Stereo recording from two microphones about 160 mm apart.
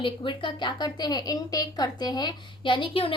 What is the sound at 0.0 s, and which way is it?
A woman's voice, 30° left (ahead or behind).